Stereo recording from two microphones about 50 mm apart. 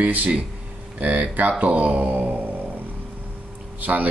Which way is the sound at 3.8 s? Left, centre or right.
Right.